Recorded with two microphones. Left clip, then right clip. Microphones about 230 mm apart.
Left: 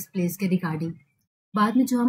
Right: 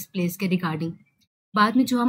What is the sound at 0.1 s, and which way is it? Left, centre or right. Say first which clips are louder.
Speech: right 1 dB; centre.